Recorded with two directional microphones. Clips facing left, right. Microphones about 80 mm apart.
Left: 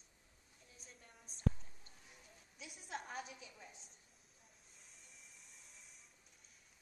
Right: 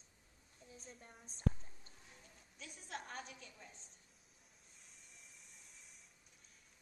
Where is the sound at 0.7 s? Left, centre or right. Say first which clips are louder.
Right 5 dB; right.